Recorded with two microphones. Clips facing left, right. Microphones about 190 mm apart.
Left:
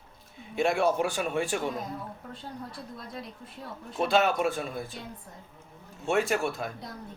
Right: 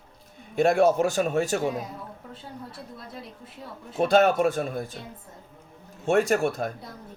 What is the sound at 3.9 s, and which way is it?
Speech, 45° right (ahead or behind).